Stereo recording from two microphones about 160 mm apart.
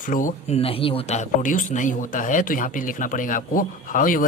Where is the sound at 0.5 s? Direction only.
35° left (ahead or behind).